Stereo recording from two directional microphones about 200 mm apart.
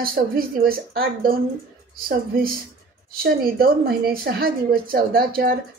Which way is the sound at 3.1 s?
45° right (ahead or behind).